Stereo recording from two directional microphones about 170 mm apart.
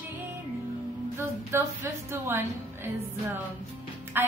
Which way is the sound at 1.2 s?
15° right (ahead or behind).